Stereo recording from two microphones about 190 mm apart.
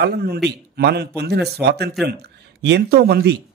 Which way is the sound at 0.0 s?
55° right (ahead or behind).